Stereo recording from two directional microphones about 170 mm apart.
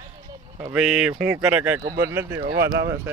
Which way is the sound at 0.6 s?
5° right (ahead or behind).